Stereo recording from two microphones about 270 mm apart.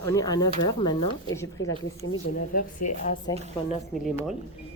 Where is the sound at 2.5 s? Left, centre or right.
Left.